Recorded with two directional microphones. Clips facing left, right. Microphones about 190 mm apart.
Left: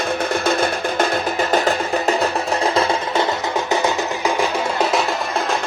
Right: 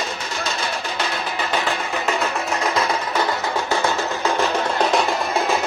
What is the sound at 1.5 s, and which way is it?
Music, 40° left (ahead or behind).